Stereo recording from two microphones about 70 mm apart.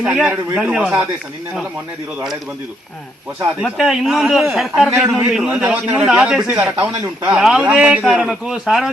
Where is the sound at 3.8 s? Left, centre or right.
Centre.